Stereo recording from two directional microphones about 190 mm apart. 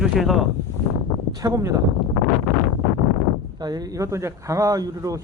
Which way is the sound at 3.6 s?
20° right (ahead or behind).